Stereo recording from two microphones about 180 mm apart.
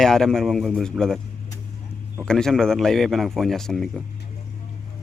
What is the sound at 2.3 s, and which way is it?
A man's voice, 5° left (ahead or behind).